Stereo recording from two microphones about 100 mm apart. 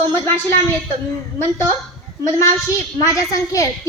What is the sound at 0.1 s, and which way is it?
Speech, 25° left (ahead or behind).